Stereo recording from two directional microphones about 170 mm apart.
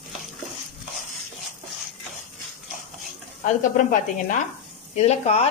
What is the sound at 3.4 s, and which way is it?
A woman's voice, 50° left (ahead or behind).